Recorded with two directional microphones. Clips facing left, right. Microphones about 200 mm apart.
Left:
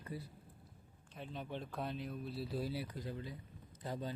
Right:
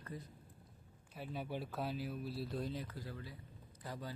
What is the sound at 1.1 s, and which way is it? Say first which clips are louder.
A man's voice: right 2 dB; 5° right (ahead or behind).